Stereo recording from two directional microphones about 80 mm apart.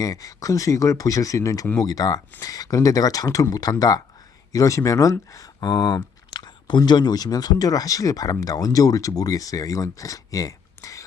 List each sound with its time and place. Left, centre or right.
0.0 s speech: left